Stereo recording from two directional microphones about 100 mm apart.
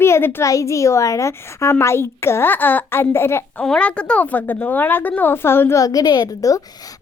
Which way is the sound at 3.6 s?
10° left (ahead or behind).